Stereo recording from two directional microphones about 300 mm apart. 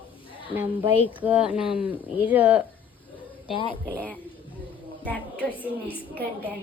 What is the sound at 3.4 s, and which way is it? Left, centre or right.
Speech, centre.